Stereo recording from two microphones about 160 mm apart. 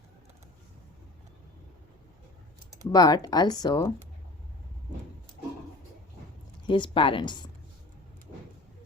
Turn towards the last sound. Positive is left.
turn(degrees=30)  # may be behind; listen again after turning